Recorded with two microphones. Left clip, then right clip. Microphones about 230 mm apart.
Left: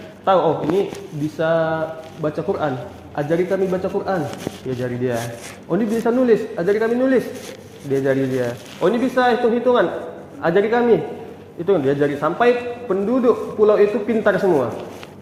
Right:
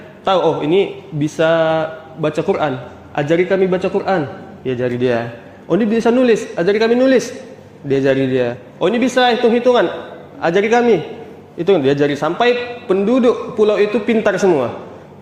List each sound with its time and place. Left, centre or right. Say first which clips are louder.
0.3 s a man's voice: right 2 dB; right